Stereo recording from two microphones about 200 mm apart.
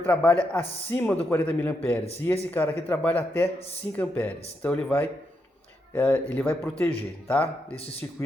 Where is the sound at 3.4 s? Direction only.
30° left (ahead or behind).